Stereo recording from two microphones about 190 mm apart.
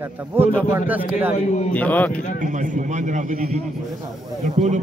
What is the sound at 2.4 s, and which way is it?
A man's voice, 40° right (ahead or behind).